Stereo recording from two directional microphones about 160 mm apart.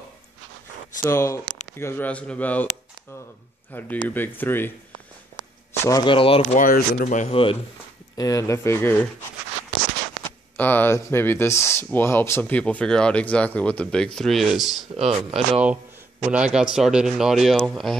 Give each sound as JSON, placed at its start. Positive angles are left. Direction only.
{"t": 1.0, "sound": "speech", "side_deg": 20}
{"t": 3.7, "sound": "speech", "side_deg": 10}
{"t": 5.9, "sound": "speech", "side_deg": 25}
{"t": 6.5, "sound": "speech", "side_deg": 60}
{"t": 8.2, "sound": "speech", "side_deg": 20}
{"t": 10.6, "sound": "speech", "side_deg": 10}
{"t": 15.0, "sound": "speech", "side_deg": -40}
{"t": 16.3, "sound": "speech", "side_deg": -5}